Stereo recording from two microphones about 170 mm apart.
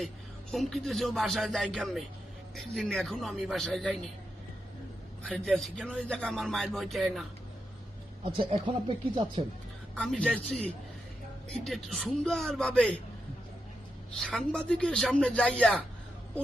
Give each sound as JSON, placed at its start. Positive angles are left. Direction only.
{"t": 0.5, "sound": "speech", "side_deg": 0}
{"t": 5.3, "sound": "speech", "side_deg": 0}
{"t": 8.2, "sound": "speech", "side_deg": -30}
{"t": 9.9, "sound": "speech", "side_deg": 5}
{"t": 14.2, "sound": "speech", "side_deg": 0}